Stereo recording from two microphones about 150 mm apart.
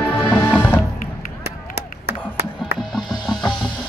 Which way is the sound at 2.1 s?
90° right.